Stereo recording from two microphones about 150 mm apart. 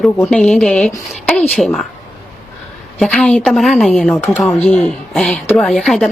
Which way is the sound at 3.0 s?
5° left (ahead or behind).